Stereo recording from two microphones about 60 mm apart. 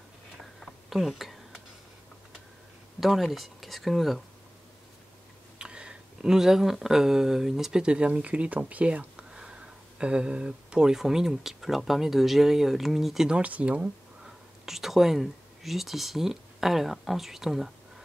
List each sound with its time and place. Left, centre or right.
0.6 s a sound: centre
3.0 s speech: centre
5.6 s speech: centre
13.3 s speech: right
14.2 s speech: centre